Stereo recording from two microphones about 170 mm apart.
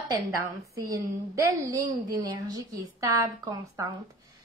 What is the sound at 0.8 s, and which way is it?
A woman's voice, 20° right (ahead or behind).